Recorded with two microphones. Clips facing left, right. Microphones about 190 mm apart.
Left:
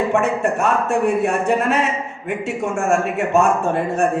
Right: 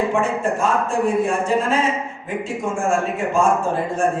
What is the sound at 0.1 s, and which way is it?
Speech, 65° left (ahead or behind).